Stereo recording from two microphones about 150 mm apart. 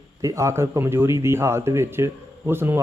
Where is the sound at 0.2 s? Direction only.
20° right (ahead or behind).